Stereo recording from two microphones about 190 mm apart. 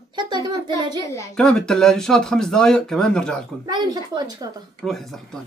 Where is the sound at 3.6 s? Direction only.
20° right (ahead or behind).